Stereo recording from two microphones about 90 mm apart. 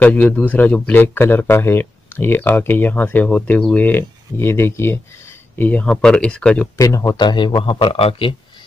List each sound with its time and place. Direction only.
0.0 s speech: 15° left (ahead or behind)
5.7 s speech: 15° left (ahead or behind)
6.8 s speech: 40° left (ahead or behind)
7.2 s a man's voice: 55° left (ahead or behind); by 8.4 s 90° left